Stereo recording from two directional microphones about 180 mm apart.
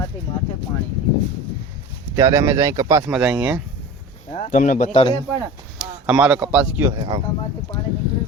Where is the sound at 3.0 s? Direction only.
5° right (ahead or behind).